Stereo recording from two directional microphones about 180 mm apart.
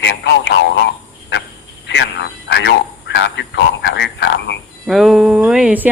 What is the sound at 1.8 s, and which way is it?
Speech, 80° left.